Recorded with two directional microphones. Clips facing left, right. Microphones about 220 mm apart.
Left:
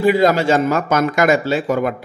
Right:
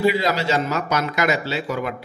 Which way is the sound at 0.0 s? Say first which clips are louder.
Left 6 dB; 50° left (ahead or behind).